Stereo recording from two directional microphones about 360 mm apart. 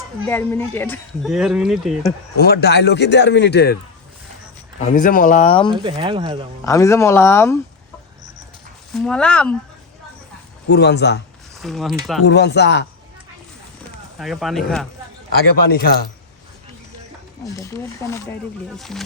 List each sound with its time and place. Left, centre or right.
0.3 s speech: centre
2.4 s a man's voice: left
4.8 s a man's voice: left
5.7 s speech: centre
6.7 s speech: centre
8.9 s speech: centre
10.7 s a man's voice: left
11.6 s speech: centre
12.2 s a man's voice: left
14.2 s speech: centre
15.6 s a man's voice: left
17.4 s speech: centre